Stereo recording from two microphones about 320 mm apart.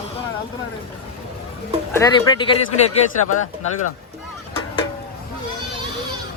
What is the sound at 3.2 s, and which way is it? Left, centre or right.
Speech, left.